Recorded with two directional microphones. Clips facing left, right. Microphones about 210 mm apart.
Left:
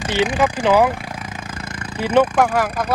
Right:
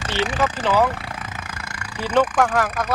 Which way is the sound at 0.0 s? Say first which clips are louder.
Left 4 dB; 15° left (ahead or behind).